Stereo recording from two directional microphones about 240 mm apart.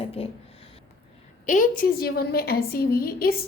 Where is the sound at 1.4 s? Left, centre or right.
Left.